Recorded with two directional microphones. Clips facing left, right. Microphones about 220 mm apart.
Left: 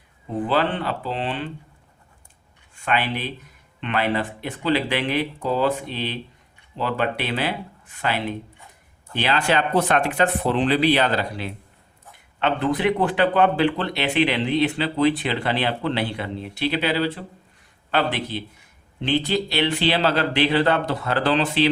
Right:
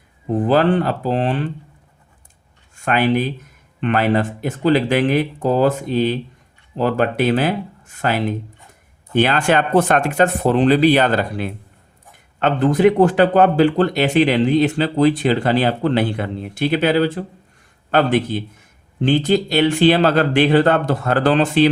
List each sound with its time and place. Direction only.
0.3 s speech: 45° right (ahead or behind)
2.7 s speech: 45° right (ahead or behind)